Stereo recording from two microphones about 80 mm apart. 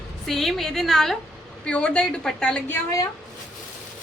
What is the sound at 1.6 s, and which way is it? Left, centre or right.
A woman's voice, centre.